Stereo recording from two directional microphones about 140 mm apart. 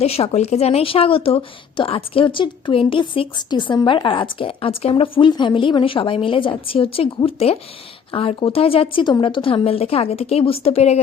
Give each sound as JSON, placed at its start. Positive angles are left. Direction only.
{"t": 0.0, "sound": "a woman's voice", "side_deg": 45}